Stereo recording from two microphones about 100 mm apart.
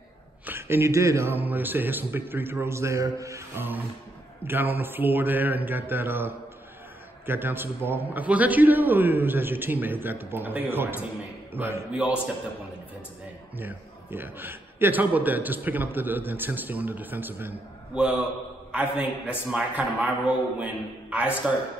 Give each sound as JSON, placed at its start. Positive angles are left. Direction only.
{"t": 0.5, "sound": "a man's voice", "side_deg": -25}
{"t": 11.9, "sound": "a man's voice", "side_deg": -10}
{"t": 13.6, "sound": "a man's voice", "side_deg": -20}